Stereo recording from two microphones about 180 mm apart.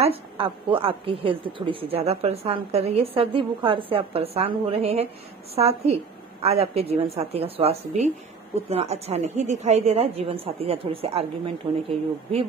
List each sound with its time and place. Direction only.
0.0 s a woman's voice: 30° right (ahead or behind)